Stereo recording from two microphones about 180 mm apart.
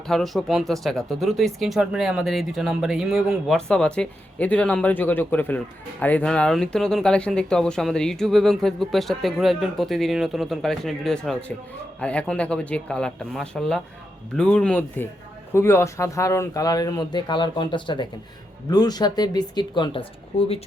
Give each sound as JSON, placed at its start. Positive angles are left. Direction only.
{"t": 0.1, "sound": "speech", "side_deg": 0}